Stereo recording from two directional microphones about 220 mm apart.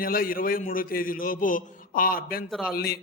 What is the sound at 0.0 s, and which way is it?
A man's voice, 40° left (ahead or behind).